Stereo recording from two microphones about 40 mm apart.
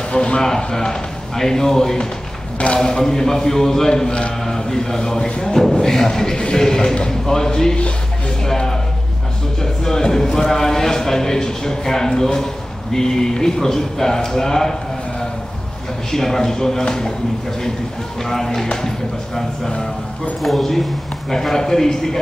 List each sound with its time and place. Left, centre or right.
0.1 s a man's voice: left
8.5 s a sound: centre
9.6 s a man's voice: centre
18.2 s a man's voice: centre